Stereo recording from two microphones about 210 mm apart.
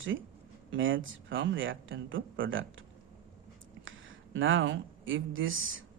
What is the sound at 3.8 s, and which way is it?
Speech, 65° right (ahead or behind).